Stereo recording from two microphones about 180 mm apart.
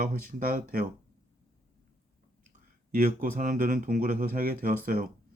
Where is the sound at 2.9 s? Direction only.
50° right (ahead or behind).